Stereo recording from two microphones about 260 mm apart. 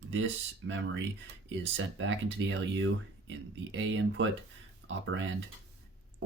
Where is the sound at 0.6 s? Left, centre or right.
Right.